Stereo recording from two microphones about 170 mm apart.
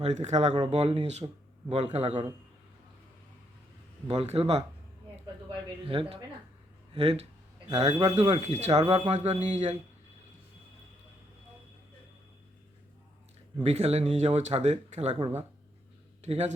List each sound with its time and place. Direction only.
0.0 s speech: 40° right (ahead or behind)
4.1 s speech: 35° right (ahead or behind)
5.9 s speech: 30° right (ahead or behind)
8.1 s speech: 35° right (ahead or behind)
13.6 s speech: 35° right (ahead or behind)
16.2 s speech: 40° right (ahead or behind)